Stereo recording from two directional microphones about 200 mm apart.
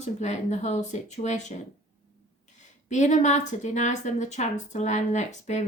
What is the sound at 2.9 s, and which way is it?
Speech, 35° left (ahead or behind).